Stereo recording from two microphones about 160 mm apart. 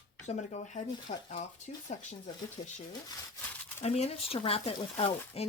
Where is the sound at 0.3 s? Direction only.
45° left (ahead or behind).